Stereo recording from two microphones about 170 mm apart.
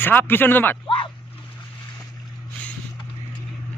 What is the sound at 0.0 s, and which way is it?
Speech, 10° left (ahead or behind).